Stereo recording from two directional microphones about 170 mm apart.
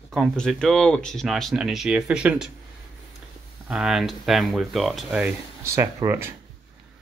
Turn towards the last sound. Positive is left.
turn(degrees=-15)  # may be behind; listen again after turning